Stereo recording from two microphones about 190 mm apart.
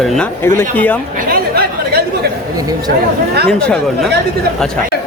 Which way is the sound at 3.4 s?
5° left (ahead or behind).